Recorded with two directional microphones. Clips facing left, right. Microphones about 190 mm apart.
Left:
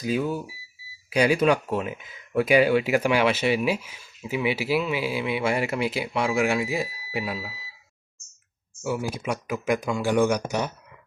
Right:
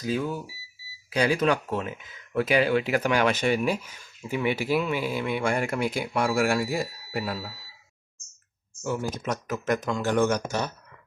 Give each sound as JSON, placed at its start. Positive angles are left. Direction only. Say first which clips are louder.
{"t": 0.0, "sound": "speech", "louder": "left 2 dB", "side_deg": 10}
{"t": 8.8, "sound": "speech", "louder": "left 1 dB", "side_deg": 10}